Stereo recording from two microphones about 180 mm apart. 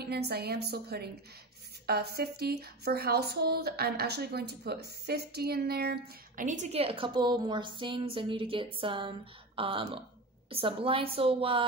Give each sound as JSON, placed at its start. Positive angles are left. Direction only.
{"t": 0.0, "sound": "a woman's voice", "side_deg": -60}